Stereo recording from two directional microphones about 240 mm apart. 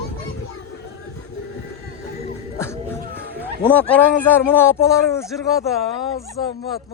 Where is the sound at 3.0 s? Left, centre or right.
Right.